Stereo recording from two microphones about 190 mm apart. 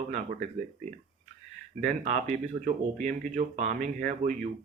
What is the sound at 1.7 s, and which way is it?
Speech, 40° right (ahead or behind).